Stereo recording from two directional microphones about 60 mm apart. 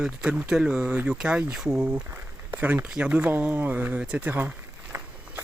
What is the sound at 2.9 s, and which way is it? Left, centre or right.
Speech, centre.